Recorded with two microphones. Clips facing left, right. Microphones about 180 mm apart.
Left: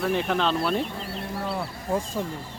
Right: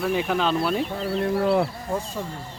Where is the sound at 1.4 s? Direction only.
60° right (ahead or behind).